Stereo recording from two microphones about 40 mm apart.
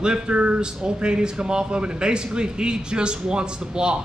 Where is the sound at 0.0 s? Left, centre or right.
Right.